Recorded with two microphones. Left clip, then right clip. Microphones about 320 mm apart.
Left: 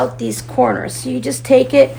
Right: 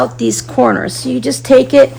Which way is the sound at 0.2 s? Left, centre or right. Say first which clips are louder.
Right 3 dB; right.